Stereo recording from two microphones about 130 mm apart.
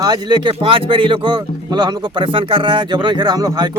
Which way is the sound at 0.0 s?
35° right (ahead or behind).